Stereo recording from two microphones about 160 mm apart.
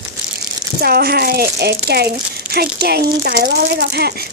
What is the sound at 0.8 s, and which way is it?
Speech, 75° right (ahead or behind).